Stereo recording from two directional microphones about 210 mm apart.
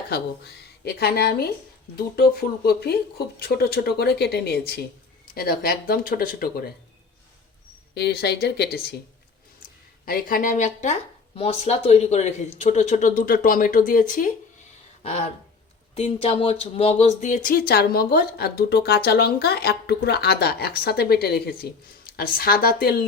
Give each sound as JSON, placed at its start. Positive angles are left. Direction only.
{"t": 0.1, "sound": "speech", "side_deg": 50}
{"t": 7.9, "sound": "speech", "side_deg": 50}
{"t": 10.1, "sound": "speech", "side_deg": 40}